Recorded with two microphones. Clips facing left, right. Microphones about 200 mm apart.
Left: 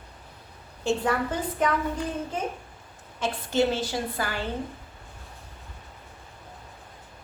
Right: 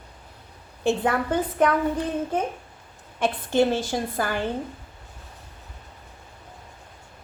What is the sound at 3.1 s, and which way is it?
A woman's voice, 55° right (ahead or behind).